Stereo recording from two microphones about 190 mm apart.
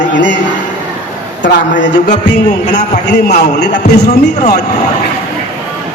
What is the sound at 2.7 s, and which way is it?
A man's voice, 60° left (ahead or behind).